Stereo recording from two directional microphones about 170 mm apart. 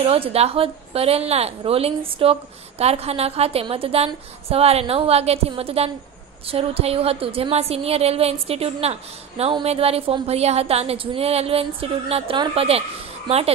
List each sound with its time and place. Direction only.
0.0 s speech: 35° right (ahead or behind)